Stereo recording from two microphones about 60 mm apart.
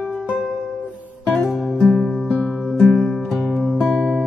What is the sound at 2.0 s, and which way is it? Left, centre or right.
Music, centre.